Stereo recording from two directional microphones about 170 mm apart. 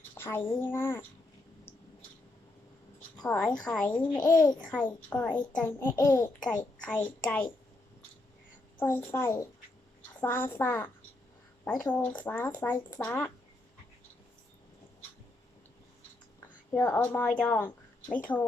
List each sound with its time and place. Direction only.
0.1 s a child's voice: 15° left (ahead or behind)
3.2 s a child's voice: 5° left (ahead or behind)
4.2 s a child's voice: 25° left (ahead or behind)
5.0 s a child's voice: 10° left (ahead or behind)
8.8 s a child's voice: 15° left (ahead or behind)
16.7 s a child's voice: 10° left (ahead or behind)